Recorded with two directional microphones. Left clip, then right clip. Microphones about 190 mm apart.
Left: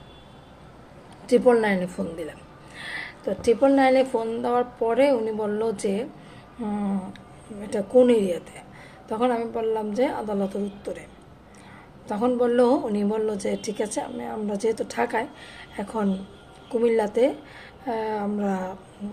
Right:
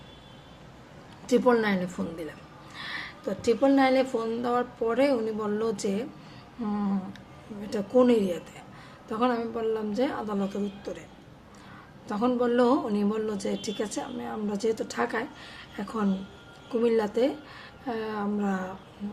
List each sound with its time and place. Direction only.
1.3 s a woman's voice: 20° right (ahead or behind)
6.7 s a sound: 20° right (ahead or behind)
7.6 s a woman's voice: 15° right (ahead or behind)
12.0 s a woman's voice: 15° right (ahead or behind)